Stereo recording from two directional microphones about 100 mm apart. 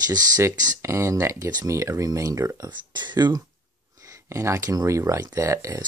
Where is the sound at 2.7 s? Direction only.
50° right (ahead or behind); by 5.8 s 30° right (ahead or behind).